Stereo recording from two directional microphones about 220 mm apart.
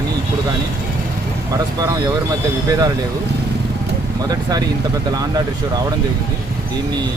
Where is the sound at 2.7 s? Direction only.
15° right (ahead or behind).